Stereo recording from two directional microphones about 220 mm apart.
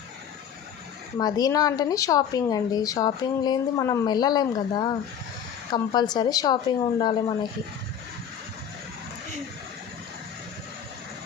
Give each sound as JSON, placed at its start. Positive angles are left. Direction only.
{"t": 1.2, "sound": "speech", "side_deg": 15}